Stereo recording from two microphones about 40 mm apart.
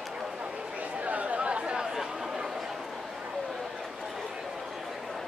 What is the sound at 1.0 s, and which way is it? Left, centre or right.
Chatter, right.